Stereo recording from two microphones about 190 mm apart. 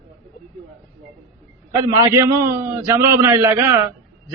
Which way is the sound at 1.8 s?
15° right (ahead or behind).